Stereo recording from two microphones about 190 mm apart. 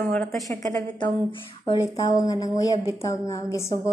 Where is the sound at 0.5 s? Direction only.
15° left (ahead or behind).